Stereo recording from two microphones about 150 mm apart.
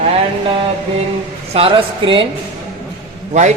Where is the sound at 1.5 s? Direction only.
35° right (ahead or behind).